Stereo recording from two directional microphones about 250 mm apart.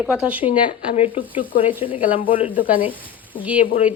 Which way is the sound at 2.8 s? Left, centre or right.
Centre.